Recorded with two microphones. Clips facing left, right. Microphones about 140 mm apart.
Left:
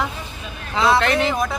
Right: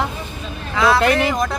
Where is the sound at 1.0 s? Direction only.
10° right (ahead or behind).